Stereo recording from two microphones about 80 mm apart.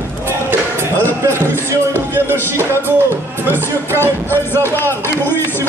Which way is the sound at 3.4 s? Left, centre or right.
Right.